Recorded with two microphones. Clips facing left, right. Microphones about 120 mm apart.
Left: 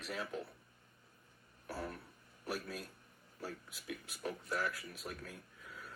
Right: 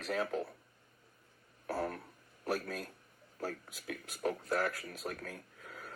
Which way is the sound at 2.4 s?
45° right (ahead or behind).